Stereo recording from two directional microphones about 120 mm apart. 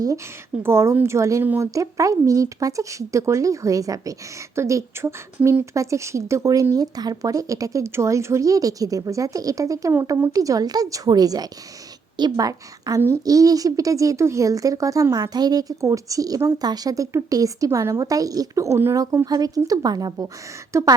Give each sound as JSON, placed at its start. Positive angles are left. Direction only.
{"t": 0.6, "sound": "a woman's voice", "side_deg": -20}